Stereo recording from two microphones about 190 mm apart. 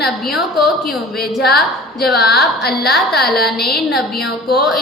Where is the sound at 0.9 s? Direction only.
55° left (ahead or behind).